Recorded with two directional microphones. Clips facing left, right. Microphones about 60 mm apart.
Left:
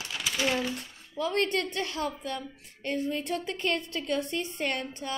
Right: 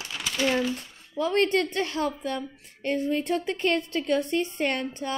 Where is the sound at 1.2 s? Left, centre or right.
Right.